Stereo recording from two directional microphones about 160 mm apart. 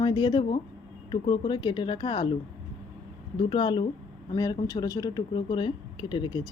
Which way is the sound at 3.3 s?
30° left (ahead or behind).